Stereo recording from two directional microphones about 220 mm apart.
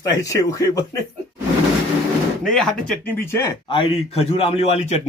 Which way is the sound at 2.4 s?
Centre (ahead or behind).